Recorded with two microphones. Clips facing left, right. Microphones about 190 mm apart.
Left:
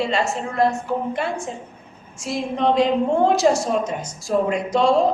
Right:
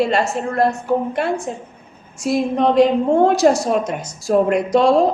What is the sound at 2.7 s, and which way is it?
Speech, 60° right (ahead or behind).